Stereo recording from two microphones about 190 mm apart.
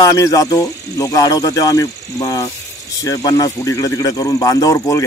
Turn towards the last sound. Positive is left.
turn(degrees=15)  # may be behind; listen again after turning